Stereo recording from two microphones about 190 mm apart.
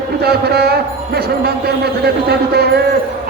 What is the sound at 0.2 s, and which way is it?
A man's voice, 55° right (ahead or behind).